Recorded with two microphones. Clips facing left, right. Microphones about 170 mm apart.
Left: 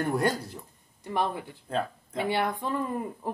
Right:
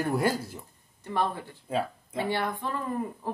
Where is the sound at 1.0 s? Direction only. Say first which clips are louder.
Even; 15° left (ahead or behind).